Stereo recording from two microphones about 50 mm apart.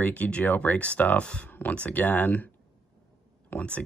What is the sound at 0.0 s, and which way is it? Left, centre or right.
Speech, left.